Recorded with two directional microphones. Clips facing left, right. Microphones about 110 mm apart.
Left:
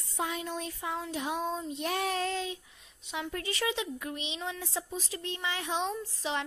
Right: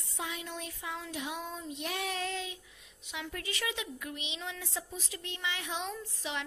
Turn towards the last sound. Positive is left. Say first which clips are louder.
# left 5 dB
turn(degrees=35)  # may be behind; listen again after turning